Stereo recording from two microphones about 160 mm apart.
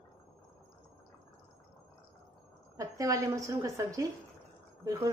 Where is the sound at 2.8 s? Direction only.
20° right (ahead or behind).